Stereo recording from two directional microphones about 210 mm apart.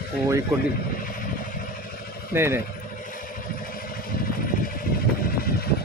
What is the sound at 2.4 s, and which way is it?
Speech, 10° right (ahead or behind).